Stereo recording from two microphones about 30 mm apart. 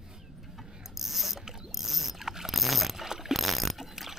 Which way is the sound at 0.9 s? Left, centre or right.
Centre.